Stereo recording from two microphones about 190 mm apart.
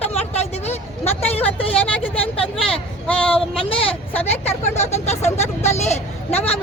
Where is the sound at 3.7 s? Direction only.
30° left (ahead or behind).